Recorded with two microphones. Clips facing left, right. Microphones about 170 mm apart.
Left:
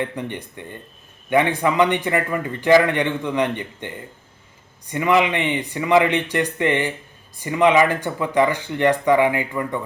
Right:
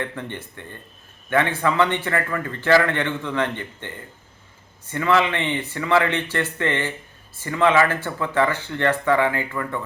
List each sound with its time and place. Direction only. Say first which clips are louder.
0.0 s a man's voice: left 3 dB; 15° left (ahead or behind)